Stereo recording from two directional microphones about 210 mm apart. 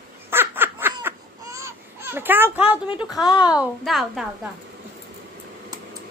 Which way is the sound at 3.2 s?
20° left (ahead or behind).